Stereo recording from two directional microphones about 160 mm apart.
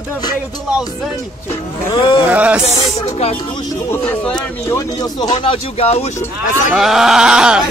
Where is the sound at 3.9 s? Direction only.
10° left (ahead or behind).